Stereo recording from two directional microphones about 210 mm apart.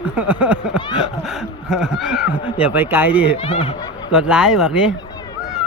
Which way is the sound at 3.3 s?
25° left (ahead or behind).